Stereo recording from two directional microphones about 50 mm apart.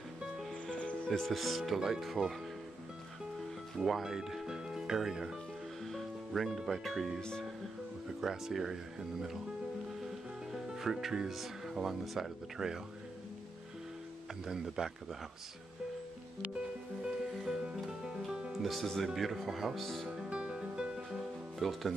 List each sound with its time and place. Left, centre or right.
0.7 s music: centre
1.2 s speech: centre
3.7 s speech: centre
5.9 s speech: centre
7.2 s speech: centre
8.2 s speech: centre
10.5 s speech: centre
14.5 s speech: centre
17.3 s music: centre
18.5 s speech: centre
20.1 s music: right
21.5 s speech: centre